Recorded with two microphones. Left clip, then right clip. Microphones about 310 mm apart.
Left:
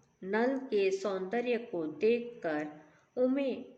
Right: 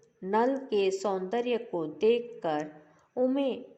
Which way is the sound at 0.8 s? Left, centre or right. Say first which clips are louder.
Right 2 dB; centre.